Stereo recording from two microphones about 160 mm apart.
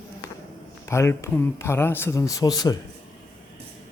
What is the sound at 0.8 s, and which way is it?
Speech, 15° left (ahead or behind).